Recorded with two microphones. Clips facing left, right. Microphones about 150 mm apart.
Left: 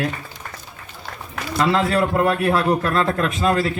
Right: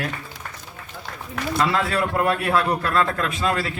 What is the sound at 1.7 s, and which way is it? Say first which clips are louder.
A man's voice: left 4 dB; 25° left (ahead or behind).